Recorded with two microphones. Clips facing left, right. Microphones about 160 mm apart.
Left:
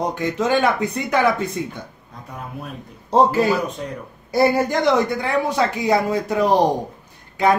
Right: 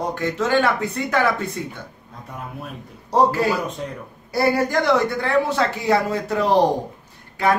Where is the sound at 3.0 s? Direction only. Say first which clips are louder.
Left 2 dB; 20° left (ahead or behind).